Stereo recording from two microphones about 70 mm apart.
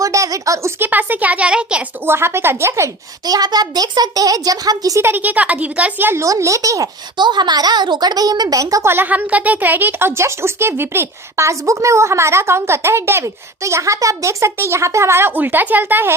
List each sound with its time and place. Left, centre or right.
0.0 s a sound: right
0.8 s speech: right
2.0 s speech: right
3.2 s a child's voice: right
4.9 s speech: right
6.2 s speech: right
7.2 s a child's voice: right
8.8 s speech: right
9.0 s speech: right
15.4 s speech: right